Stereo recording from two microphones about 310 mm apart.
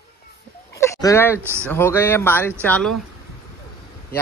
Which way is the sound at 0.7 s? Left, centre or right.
Centre.